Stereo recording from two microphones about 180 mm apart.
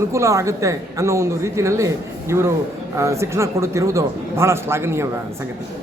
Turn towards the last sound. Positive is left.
turn(degrees=-15)  # may be behind; listen again after turning